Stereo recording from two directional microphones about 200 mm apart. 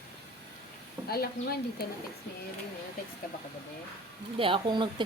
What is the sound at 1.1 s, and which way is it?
Speech, 50° left (ahead or behind).